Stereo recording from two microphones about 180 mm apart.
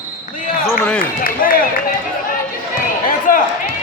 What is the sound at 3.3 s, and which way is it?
Run, 50° left (ahead or behind).